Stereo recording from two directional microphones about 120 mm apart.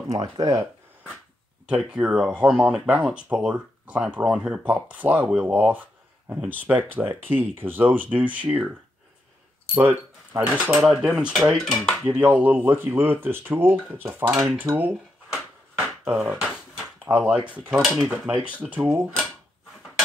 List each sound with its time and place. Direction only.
0.4 s speech: 25° right (ahead or behind)
1.7 s speech: 10° right (ahead or behind)
9.8 s speech: 15° right (ahead or behind)
11.0 s dishes: 5° right (ahead or behind)
12.1 s speech: 15° right (ahead or behind)
14.8 s a sound: 10° right (ahead or behind)
15.8 s speech: 10° right (ahead or behind)